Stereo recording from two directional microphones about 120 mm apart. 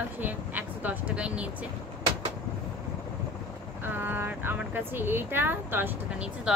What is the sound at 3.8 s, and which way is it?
Speech, 15° right (ahead or behind).